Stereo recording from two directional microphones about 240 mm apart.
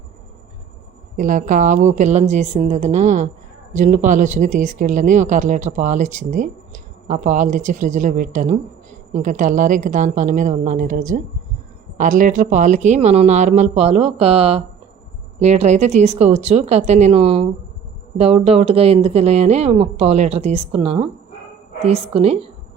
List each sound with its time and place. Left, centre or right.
1.1 s speech: right